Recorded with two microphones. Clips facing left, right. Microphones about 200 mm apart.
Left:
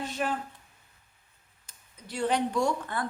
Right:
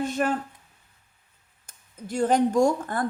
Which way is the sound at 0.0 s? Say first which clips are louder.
Right 6 dB; 50° right (ahead or behind).